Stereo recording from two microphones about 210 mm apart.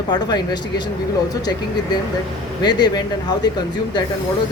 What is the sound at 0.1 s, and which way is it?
Speech, 20° left (ahead or behind).